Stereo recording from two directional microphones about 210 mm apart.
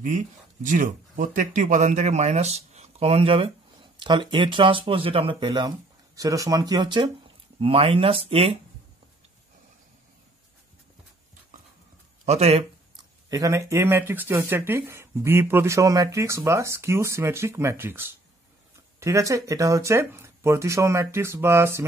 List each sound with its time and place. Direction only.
0.7 s speech: 40° right (ahead or behind)
11.5 s clip-clop: 40° right (ahead or behind)
12.3 s a sound: 30° right (ahead or behind)
13.3 s speech: 15° right (ahead or behind)